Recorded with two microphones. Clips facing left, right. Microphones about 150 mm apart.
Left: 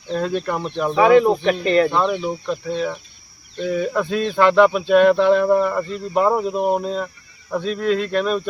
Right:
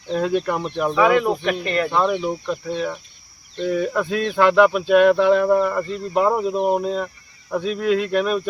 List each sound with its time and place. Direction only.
0.1 s speech: 5° right (ahead or behind)
0.9 s speech: 30° left (ahead or behind)
1.9 s speech: 5° right (ahead or behind)